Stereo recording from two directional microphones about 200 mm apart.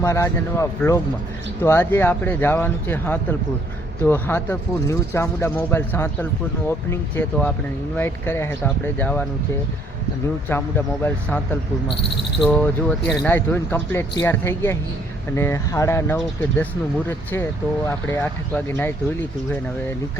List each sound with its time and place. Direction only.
0.0 s speech: 15° left (ahead or behind)
10.5 s speech: 10° left (ahead or behind)
12.5 s speech: 10° left (ahead or behind)